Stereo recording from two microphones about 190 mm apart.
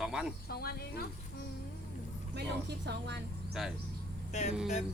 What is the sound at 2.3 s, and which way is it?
Speech, 60° right (ahead or behind).